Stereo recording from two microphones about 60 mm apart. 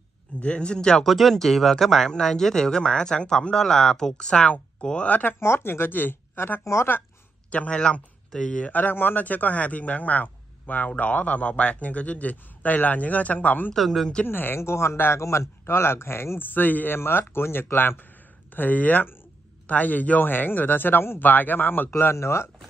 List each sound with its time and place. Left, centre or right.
0.4 s speech: centre
1.0 s speech: centre; by 5.3 s left
5.4 s speech: left
6.6 s speech: left
7.5 s speech: centre
13.7 s speech: centre
14.2 s speech: left
14.6 s speech: left
22.1 s speech: left